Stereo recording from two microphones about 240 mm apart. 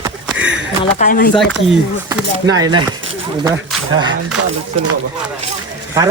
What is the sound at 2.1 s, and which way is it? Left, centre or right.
Speech, centre.